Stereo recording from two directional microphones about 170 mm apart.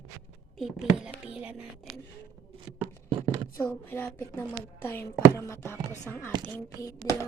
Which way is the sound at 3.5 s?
15° left (ahead or behind).